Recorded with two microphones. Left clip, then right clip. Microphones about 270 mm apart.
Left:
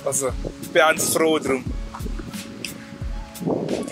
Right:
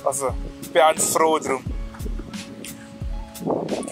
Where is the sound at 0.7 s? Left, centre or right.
Right.